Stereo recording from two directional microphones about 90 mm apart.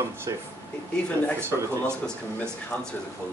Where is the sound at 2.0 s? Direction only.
10° left (ahead or behind).